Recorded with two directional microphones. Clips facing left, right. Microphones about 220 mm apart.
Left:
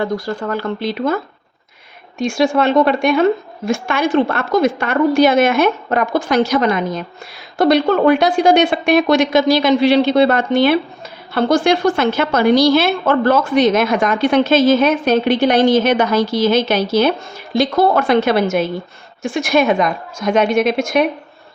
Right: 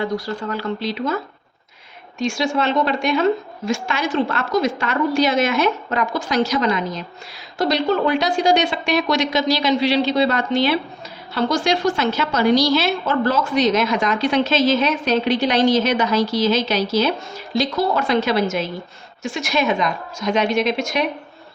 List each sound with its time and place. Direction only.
0.0 s a woman's voice: 50° left (ahead or behind)